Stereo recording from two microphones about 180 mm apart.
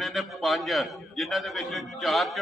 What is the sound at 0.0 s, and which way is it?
A man's voice, centre (ahead or behind).